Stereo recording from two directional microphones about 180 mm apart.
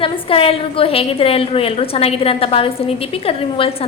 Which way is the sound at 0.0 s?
30° left (ahead or behind).